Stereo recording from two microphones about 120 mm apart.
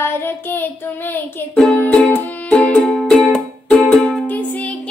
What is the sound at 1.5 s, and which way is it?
Music, 15° left (ahead or behind).